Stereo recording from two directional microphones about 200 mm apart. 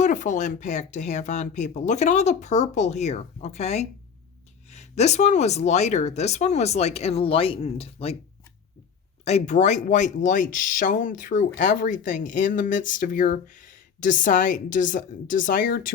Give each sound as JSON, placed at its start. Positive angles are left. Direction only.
{"t": 0.0, "sound": "speech", "side_deg": 40}
{"t": 9.2, "sound": "speech", "side_deg": 35}